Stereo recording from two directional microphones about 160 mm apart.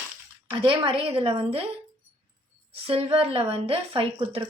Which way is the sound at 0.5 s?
30° right (ahead or behind).